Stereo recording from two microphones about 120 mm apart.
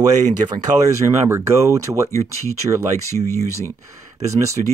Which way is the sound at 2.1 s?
25° left (ahead or behind).